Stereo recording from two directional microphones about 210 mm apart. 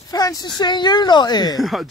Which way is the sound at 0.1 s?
20° left (ahead or behind).